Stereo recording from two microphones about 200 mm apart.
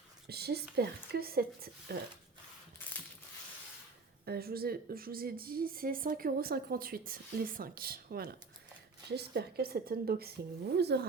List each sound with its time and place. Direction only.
0.3 s a woman's voice: 50° right (ahead or behind)
4.3 s a woman's voice: 50° right (ahead or behind)